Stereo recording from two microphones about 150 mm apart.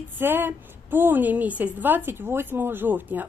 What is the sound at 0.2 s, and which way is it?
A woman's voice, 15° right (ahead or behind).